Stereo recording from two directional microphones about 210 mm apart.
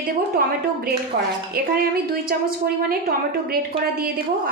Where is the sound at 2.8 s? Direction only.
45° right (ahead or behind).